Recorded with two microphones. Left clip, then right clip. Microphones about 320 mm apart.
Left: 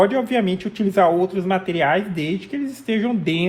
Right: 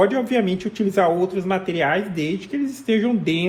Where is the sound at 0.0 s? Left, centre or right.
Left.